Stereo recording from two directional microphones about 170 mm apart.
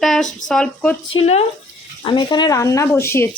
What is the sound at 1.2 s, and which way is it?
Speech, 40° left (ahead or behind).